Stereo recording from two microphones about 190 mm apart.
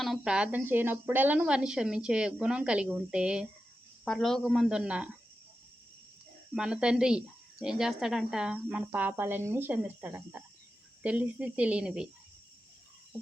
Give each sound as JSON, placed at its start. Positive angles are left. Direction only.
{"t": 0.0, "sound": "speech", "side_deg": 0}
{"t": 6.5, "sound": "speech", "side_deg": -5}